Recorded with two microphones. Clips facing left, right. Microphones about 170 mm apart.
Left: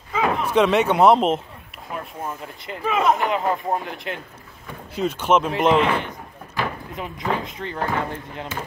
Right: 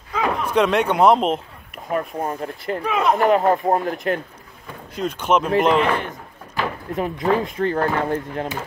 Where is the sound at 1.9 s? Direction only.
55° right (ahead or behind).